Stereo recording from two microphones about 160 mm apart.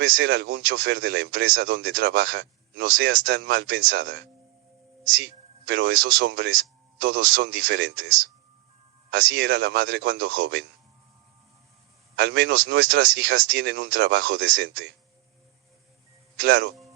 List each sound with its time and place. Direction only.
0.2 s speech: 90° right
5.6 s speech: 90° right
9.0 s speech: 90° right
12.1 s speech: 90° right
16.4 s speech: 90° right